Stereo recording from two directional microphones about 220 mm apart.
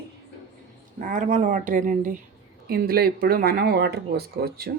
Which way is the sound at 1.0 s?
35° right (ahead or behind).